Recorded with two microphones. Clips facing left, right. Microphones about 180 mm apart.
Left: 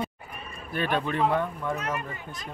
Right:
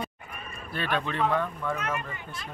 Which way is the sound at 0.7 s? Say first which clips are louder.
Left 3 dB; 15° left (ahead or behind).